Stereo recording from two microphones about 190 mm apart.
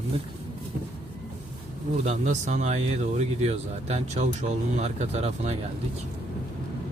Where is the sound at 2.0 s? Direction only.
40° right (ahead or behind).